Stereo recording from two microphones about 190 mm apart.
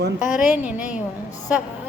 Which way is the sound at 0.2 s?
45° left (ahead or behind).